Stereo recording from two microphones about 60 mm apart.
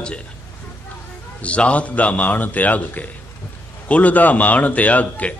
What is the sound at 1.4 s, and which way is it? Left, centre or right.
A man's voice, left.